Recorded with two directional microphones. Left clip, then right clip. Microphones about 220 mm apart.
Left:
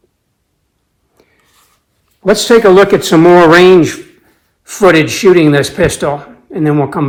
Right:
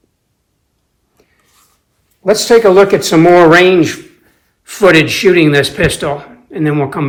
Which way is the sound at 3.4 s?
25° left (ahead or behind).